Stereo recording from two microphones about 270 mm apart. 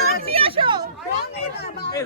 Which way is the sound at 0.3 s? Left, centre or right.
Right.